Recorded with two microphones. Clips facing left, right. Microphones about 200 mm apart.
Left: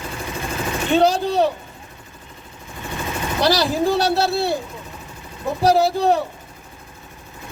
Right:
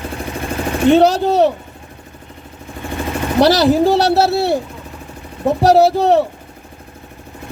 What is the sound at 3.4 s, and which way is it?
A man's voice, 70° right (ahead or behind).